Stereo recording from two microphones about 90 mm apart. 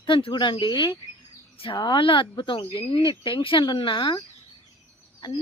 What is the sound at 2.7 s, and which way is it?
Speech, 85° left.